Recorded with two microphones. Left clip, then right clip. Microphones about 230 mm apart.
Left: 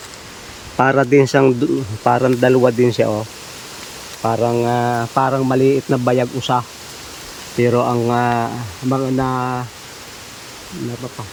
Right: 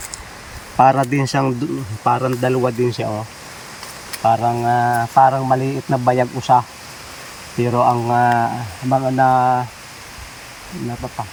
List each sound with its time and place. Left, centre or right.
0.8 s speech: centre
4.2 s speech: left